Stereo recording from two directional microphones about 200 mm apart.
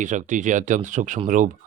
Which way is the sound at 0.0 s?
40° right (ahead or behind).